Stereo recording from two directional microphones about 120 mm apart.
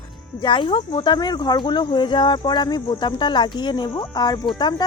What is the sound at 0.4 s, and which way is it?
Speech, 40° left (ahead or behind).